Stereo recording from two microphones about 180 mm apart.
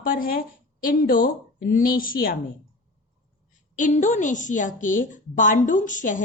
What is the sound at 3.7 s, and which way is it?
A woman's voice, 45° left (ahead or behind).